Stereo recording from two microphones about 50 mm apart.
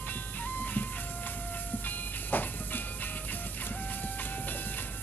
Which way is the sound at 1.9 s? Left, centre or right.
Left.